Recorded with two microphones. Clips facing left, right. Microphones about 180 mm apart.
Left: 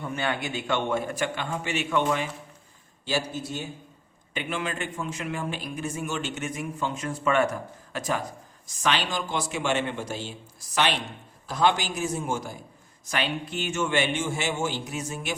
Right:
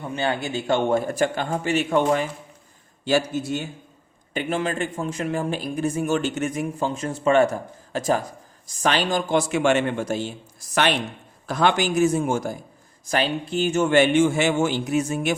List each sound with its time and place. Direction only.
0.0 s speech: 25° right (ahead or behind); by 2.3 s 40° right (ahead or behind)
3.0 s a man's voice: 55° right (ahead or behind)
4.4 s a man's voice: 40° right (ahead or behind)
9.5 s a man's voice: 55° right (ahead or behind)
11.4 s a man's voice: 60° right (ahead or behind)
13.1 s speech: 35° right (ahead or behind)
13.8 s a man's voice: 50° right (ahead or behind)